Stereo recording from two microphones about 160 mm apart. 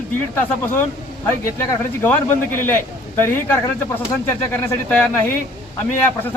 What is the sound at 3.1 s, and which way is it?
A man's voice, 15° left (ahead or behind).